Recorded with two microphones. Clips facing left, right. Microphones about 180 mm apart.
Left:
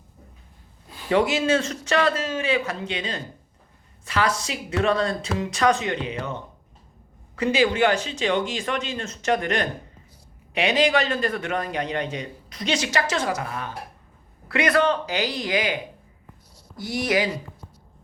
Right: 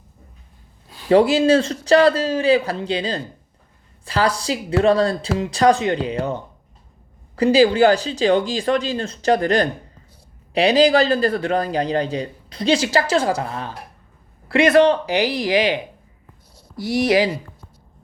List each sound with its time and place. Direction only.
1.1 s a man's voice: 35° right (ahead or behind)
16.8 s speech: 25° right (ahead or behind)